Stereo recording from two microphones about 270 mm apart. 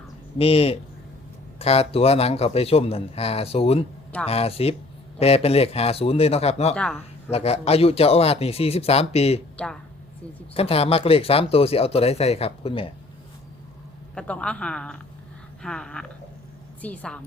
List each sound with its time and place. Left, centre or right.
0.3 s speech: left
6.7 s speech: centre
7.3 s speech: left
10.5 s speech: left
14.2 s speech: centre